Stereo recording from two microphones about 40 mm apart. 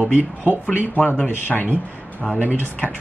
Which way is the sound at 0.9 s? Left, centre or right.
Left.